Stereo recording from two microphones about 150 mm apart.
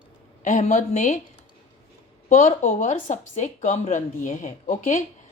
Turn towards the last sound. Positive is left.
turn(degrees=60)  # may be behind; listen again after turning